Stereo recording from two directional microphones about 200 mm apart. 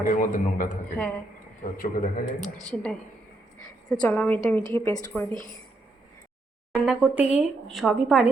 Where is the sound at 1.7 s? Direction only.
45° left (ahead or behind).